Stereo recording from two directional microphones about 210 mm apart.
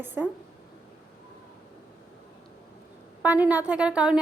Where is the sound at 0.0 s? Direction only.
10° right (ahead or behind).